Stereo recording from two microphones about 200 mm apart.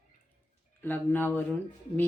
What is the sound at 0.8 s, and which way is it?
Speech, 10° left (ahead or behind).